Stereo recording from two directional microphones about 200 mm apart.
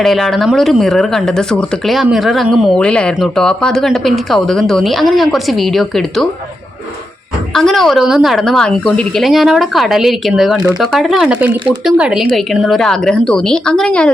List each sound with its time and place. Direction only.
0.0 s speech: centre (ahead or behind)
7.5 s speech: centre (ahead or behind)